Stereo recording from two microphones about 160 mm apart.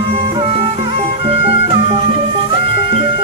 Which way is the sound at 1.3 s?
35° right (ahead or behind).